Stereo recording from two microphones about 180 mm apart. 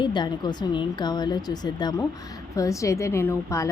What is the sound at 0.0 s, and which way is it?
A woman's voice, 25° left (ahead or behind).